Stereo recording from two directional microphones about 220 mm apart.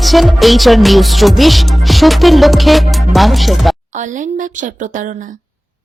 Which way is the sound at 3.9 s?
35° right (ahead or behind).